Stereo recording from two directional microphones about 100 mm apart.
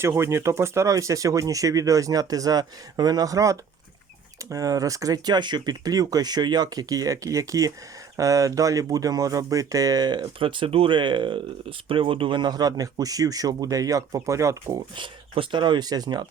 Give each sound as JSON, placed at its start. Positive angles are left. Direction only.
{"t": 0.0, "sound": "speech", "side_deg": -25}
{"t": 10.2, "sound": "speech", "side_deg": -60}
{"t": 14.9, "sound": "speech", "side_deg": -55}